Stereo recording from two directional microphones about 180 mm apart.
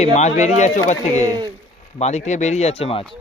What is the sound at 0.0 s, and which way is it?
Speech, 40° left (ahead or behind).